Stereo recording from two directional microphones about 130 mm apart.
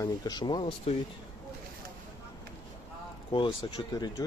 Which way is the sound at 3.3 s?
40° left (ahead or behind).